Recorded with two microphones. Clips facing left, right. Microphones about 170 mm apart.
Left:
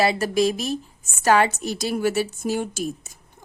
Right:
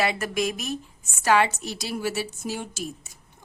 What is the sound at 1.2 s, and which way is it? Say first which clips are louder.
A woman's voice: left 3 dB; 45° left (ahead or behind).